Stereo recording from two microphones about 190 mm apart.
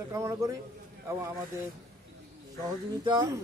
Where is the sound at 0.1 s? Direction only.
15° right (ahead or behind).